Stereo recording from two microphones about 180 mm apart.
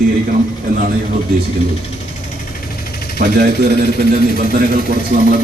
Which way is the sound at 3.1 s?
50° right (ahead or behind).